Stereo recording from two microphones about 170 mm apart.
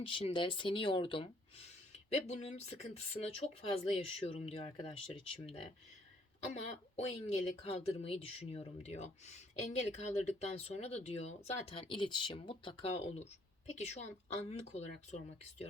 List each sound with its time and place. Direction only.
0.0 s a woman's voice: 30° left (ahead or behind)
6.5 s a woman's voice: 40° left (ahead or behind)